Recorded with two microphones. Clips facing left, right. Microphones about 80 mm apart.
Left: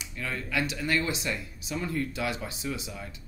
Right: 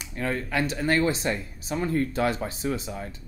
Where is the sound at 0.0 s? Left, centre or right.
Right.